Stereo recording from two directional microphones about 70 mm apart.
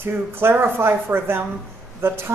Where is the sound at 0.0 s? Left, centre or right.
Right.